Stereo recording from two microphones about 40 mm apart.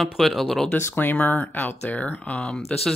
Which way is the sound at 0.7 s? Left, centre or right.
Left.